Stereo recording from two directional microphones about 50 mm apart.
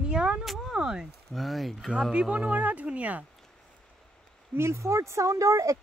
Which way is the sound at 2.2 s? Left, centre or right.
Right.